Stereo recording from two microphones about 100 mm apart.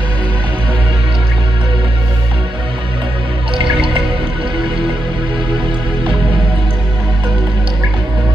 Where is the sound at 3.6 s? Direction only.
60° right (ahead or behind).